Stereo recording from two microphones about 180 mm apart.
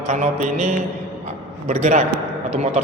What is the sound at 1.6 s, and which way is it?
Speech, 45° right (ahead or behind).